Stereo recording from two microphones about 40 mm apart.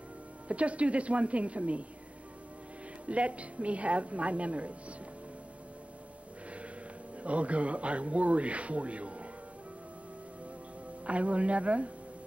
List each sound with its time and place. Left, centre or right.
0.5 s speech: right
3.1 s speech: right
7.2 s speech: right
11.1 s speech: right